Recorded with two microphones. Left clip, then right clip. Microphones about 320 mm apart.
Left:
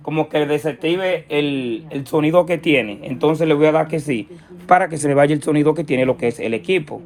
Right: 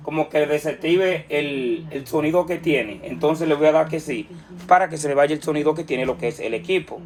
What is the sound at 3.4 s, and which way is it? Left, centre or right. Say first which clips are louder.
Speech: left 1 dB; left.